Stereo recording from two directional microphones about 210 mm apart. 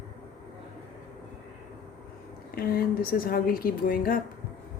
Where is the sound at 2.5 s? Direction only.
45° left (ahead or behind).